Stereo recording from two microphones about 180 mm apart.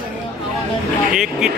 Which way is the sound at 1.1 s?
5° right (ahead or behind).